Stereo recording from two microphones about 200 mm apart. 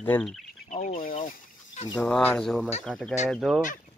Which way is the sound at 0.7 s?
40° left (ahead or behind).